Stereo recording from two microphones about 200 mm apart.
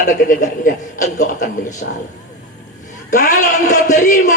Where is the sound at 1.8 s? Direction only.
50° left (ahead or behind).